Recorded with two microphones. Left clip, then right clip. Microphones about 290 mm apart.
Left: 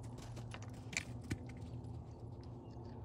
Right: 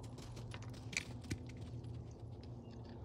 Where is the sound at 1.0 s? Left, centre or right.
Centre.